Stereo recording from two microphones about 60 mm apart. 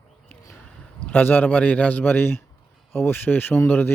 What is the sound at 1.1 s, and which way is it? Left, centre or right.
A man's voice, left.